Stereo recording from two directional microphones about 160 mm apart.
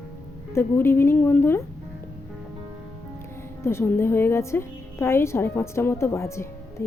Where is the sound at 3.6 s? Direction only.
15° left (ahead or behind).